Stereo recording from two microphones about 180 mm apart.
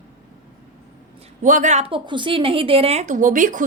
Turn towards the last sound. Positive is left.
turn(degrees=-45)  # may be behind; listen again after turning